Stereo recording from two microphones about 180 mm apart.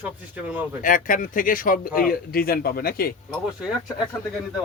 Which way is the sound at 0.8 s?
50° left (ahead or behind).